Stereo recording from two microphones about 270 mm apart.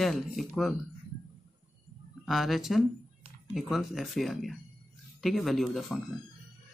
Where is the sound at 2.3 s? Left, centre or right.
Centre.